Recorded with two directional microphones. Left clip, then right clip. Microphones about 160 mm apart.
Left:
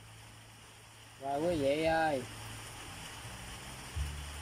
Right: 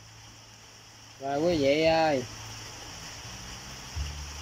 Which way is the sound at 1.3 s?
15° right (ahead or behind).